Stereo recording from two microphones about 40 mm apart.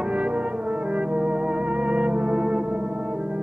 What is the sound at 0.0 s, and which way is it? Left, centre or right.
Brass instrument, right.